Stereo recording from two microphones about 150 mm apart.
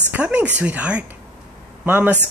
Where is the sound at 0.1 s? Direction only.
10° right (ahead or behind).